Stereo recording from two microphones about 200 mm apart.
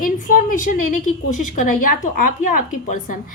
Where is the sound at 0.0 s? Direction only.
40° left (ahead or behind).